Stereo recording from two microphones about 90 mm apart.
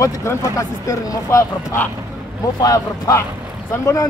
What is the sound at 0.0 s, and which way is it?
Speech, 30° left (ahead or behind).